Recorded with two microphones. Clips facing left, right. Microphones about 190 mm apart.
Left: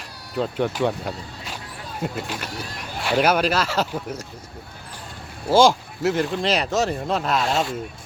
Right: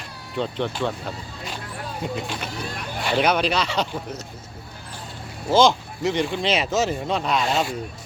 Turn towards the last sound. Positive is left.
turn(degrees=0)  # may be behind; listen again after turning